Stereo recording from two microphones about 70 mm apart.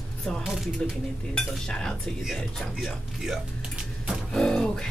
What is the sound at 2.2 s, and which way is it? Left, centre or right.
Speech, centre.